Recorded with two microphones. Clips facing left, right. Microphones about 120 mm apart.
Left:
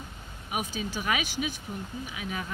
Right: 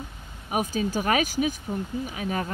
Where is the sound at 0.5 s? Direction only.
45° right (ahead or behind).